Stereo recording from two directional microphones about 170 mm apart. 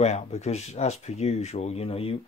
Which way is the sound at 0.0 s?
40° left (ahead or behind).